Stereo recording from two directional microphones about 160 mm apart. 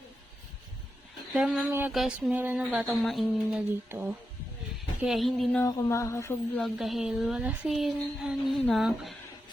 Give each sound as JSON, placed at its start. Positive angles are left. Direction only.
{"t": 1.3, "sound": "speech", "side_deg": -5}
{"t": 2.8, "sound": "speech", "side_deg": 0}
{"t": 3.8, "sound": "speech", "side_deg": -15}
{"t": 5.0, "sound": "speech", "side_deg": 0}
{"t": 5.6, "sound": "a sound", "side_deg": 20}
{"t": 6.6, "sound": "speech", "side_deg": 0}